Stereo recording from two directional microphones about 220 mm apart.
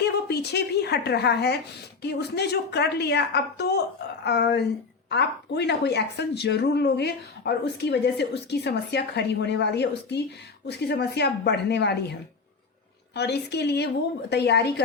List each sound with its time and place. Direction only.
0.0 s a woman's voice: 50° left (ahead or behind)
13.1 s a woman's voice: 50° left (ahead or behind)